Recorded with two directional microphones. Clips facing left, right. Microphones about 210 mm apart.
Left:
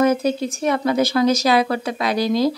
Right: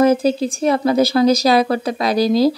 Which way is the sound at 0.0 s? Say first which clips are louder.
Right 3 dB; 30° right (ahead or behind).